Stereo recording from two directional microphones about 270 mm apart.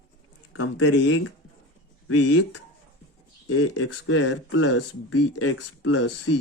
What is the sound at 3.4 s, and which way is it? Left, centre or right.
Speech, left.